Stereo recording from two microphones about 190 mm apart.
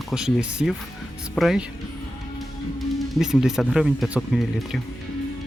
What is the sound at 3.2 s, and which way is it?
Speech, 5° right (ahead or behind).